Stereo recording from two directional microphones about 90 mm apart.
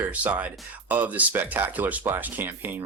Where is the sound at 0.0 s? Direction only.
20° right (ahead or behind).